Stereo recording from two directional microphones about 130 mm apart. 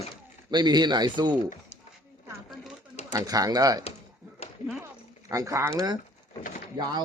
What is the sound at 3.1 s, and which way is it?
Speech, 30° right (ahead or behind).